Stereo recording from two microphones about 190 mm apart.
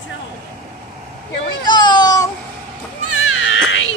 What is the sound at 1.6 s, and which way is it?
Baby cry, 25° left (ahead or behind).